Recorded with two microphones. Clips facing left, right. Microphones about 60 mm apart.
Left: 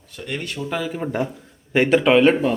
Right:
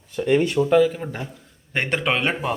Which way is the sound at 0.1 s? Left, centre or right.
Centre.